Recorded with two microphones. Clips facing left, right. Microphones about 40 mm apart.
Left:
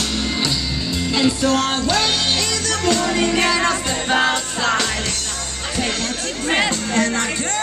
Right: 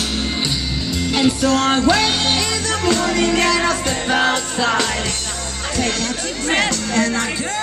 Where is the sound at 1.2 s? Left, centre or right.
Right.